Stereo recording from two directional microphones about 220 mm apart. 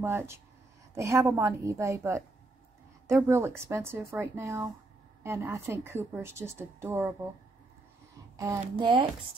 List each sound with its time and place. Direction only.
0.0 s a woman's voice: 10° right (ahead or behind)
3.3 s a woman's voice: 15° right (ahead or behind)
8.4 s speech: 15° right (ahead or behind)